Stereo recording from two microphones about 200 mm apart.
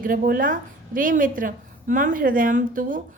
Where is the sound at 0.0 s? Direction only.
45° right (ahead or behind).